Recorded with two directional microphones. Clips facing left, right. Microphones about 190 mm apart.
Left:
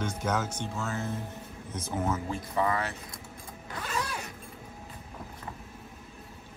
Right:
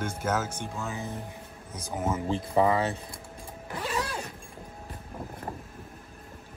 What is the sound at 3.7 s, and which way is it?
Vehicle, 25° right (ahead or behind).